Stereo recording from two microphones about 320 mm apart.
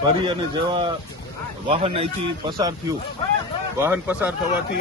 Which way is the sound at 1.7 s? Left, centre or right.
Centre.